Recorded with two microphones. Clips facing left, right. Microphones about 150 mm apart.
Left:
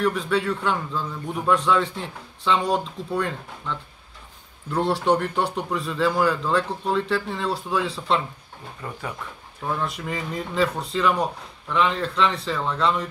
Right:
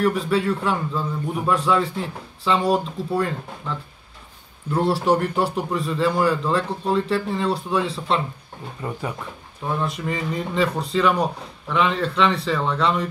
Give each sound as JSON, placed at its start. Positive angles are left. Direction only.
{"t": 0.0, "sound": "a man's voice", "side_deg": 0}
{"t": 4.7, "sound": "a man's voice", "side_deg": -5}
{"t": 8.8, "sound": "speech", "side_deg": -15}
{"t": 9.7, "sound": "a man's voice", "side_deg": 0}